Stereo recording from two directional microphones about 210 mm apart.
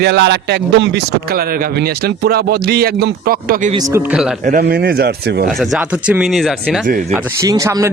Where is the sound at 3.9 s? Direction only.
5° right (ahead or behind).